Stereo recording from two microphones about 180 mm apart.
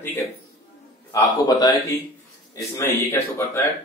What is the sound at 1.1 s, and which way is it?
Speech, 20° left (ahead or behind).